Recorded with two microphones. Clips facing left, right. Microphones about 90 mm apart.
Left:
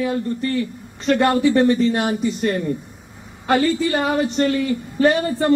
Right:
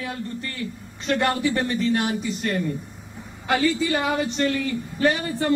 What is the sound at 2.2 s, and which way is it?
Speech, 40° left (ahead or behind).